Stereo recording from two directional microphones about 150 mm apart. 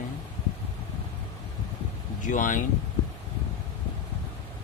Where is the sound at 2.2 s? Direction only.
60° left (ahead or behind).